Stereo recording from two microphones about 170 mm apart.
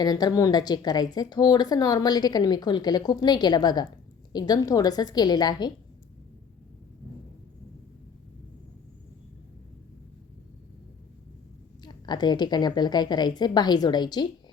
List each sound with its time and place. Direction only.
0.0 s a woman's voice: 25° left (ahead or behind)
11.8 s a woman's voice: 25° left (ahead or behind)